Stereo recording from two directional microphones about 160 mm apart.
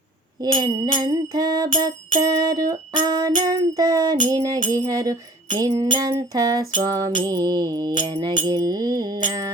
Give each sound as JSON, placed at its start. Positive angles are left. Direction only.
{"t": 0.4, "sound": "music", "side_deg": -25}